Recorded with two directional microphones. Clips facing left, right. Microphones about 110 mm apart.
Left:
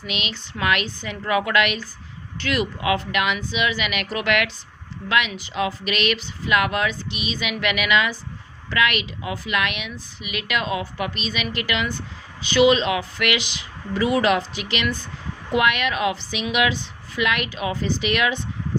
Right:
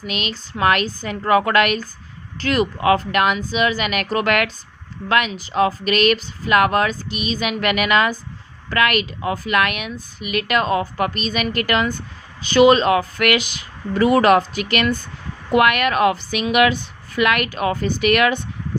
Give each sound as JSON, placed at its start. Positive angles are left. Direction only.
{"t": 0.1, "sound": "a woman's voice", "side_deg": -40}